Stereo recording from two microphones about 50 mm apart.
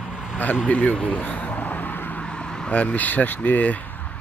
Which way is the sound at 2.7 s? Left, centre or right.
Left.